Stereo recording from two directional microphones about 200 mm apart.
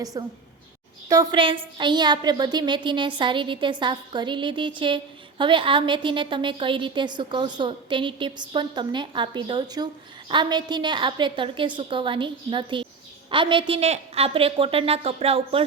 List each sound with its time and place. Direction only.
0.0 s a woman's voice: 20° right (ahead or behind)